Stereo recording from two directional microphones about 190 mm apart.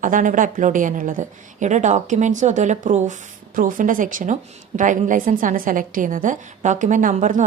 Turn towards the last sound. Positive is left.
turn(degrees=-40)  # may be behind; listen again after turning